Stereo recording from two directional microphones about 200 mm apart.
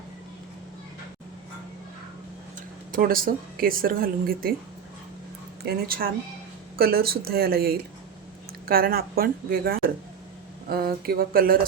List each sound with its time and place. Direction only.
2.9 s speech: 45° right (ahead or behind)
5.6 s speech: 50° right (ahead or behind)